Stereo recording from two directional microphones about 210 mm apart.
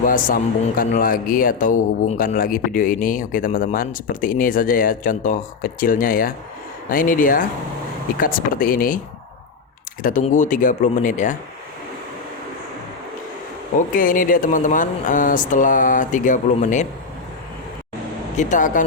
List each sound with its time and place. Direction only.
0.0 s speech: 40° left (ahead or behind)
10.0 s speech: 40° left (ahead or behind)
13.7 s speech: 40° left (ahead or behind)
18.3 s speech: 35° left (ahead or behind)